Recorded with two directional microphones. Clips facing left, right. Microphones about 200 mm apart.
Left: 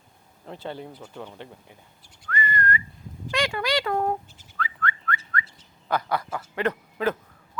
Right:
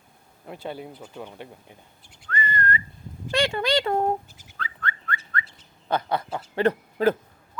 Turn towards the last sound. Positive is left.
turn(degrees=-30)  # may be behind; listen again after turning